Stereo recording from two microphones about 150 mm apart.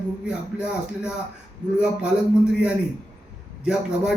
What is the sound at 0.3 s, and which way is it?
Speech, 5° right (ahead or behind).